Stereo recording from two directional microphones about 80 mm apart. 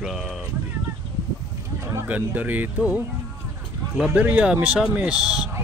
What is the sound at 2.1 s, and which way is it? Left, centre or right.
Speech, centre.